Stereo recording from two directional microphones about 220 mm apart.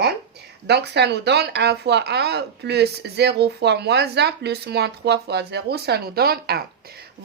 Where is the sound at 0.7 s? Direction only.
50° right (ahead or behind).